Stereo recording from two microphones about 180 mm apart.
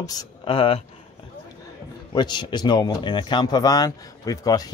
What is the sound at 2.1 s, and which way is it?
Speech, 25° left (ahead or behind).